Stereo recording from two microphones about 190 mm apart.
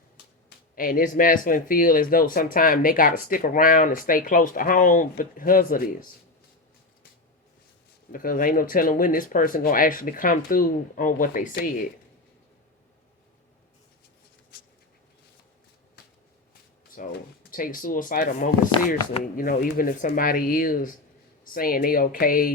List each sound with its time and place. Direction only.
0.8 s speech: 45° left (ahead or behind)
8.1 s speech: 45° left (ahead or behind)
16.9 s speech: 45° left (ahead or behind)